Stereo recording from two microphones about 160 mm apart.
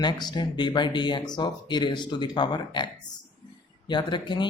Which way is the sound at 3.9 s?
30° left (ahead or behind).